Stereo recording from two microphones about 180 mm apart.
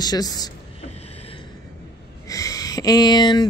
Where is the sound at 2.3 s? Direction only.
20° left (ahead or behind).